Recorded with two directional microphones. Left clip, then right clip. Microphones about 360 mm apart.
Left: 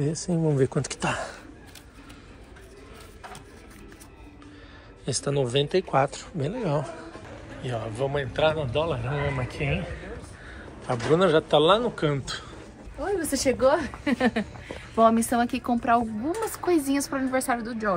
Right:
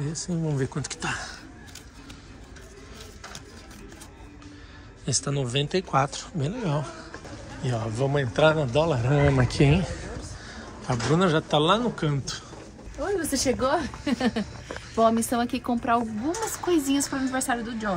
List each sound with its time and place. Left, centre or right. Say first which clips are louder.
0.3 s speech: left 6 dB; centre
0.6 s speech: left 5 dB; centre
5.0 s speech: left 2 dB; centre
7.6 s speech: right 1 dB; centre
10.5 s speech: left 1 dB; centre